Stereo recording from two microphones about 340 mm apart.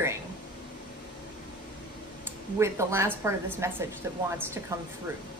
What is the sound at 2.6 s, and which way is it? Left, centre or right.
A woman's voice, centre.